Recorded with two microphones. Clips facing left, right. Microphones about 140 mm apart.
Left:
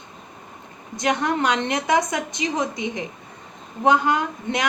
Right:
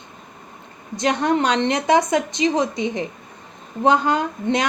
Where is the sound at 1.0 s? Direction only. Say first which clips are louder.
Right 3 dB; 30° right (ahead or behind).